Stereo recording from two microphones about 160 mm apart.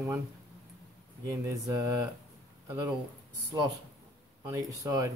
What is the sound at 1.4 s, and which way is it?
Speech, 20° right (ahead or behind).